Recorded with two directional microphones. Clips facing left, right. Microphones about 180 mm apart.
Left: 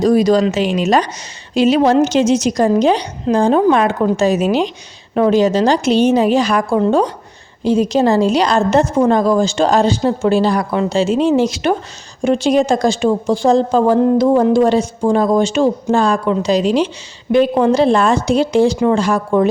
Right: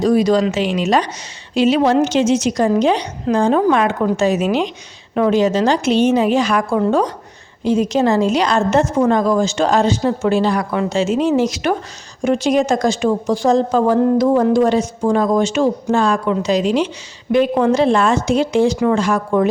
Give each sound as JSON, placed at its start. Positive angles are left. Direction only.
{"t": 0.0, "sound": "a woman's voice", "side_deg": 40}